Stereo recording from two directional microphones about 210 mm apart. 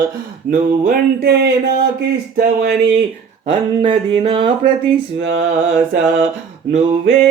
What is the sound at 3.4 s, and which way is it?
Speech, 25° right (ahead or behind).